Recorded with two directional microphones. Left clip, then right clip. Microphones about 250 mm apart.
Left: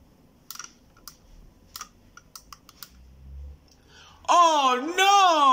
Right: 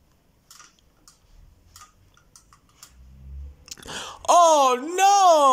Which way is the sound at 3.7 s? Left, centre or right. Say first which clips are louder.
Right 17 dB; right.